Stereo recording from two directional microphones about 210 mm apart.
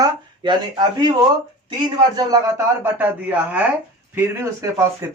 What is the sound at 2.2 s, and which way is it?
Speech, 15° right (ahead or behind).